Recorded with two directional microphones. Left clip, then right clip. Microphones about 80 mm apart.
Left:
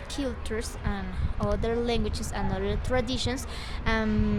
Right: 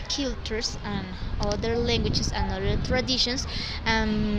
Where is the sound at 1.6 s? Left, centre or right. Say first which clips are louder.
Right 4 dB; left.